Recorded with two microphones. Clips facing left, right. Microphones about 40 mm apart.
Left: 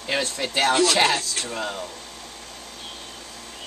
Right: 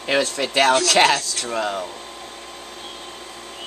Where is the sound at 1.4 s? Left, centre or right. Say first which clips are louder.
Right 6 dB; right.